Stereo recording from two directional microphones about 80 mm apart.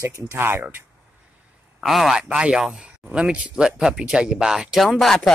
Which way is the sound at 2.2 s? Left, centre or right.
Centre.